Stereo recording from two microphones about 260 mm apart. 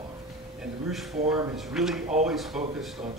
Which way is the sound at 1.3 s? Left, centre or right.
Centre.